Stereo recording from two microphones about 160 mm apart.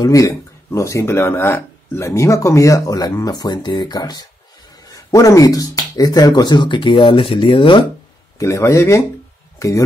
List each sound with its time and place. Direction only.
0.0 s speech: 20° left (ahead or behind)
8.4 s speech: 20° left (ahead or behind)